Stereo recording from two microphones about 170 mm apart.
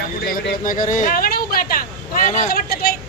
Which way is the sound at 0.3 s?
55° left (ahead or behind).